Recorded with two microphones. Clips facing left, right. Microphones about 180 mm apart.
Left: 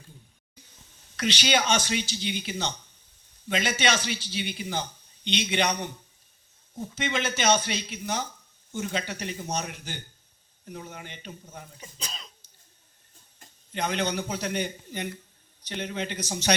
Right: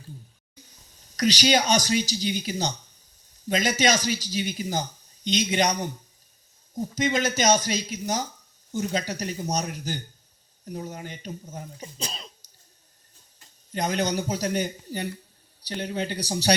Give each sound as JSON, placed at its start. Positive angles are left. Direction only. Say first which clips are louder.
{"t": 1.0, "sound": "a man's voice", "louder": "right 6 dB", "side_deg": -40}
{"t": 13.7, "sound": "a man's voice", "louder": "right 3 dB", "side_deg": -40}